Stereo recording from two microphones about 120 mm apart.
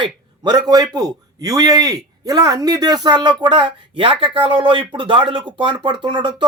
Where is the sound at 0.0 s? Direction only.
35° right (ahead or behind).